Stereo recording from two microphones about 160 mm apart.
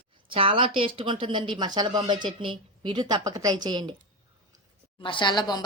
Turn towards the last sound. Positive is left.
turn(degrees=25)  # may be behind; listen again after turning